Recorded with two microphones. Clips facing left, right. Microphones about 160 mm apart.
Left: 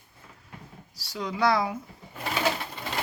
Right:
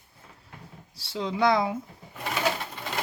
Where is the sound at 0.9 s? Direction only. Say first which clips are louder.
Right 3 dB; 25° right (ahead or behind).